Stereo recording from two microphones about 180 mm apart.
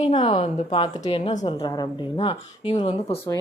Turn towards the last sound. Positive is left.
turn(degrees=30)  # may be behind; listen again after turning